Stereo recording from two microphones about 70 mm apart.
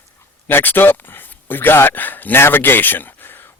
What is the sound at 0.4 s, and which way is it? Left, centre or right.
Speech, left.